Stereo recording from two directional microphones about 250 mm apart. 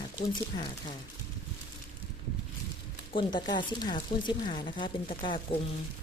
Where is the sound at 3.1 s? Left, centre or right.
Centre.